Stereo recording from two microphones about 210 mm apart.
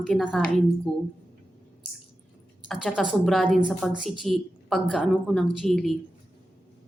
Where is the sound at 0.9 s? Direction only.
25° left (ahead or behind).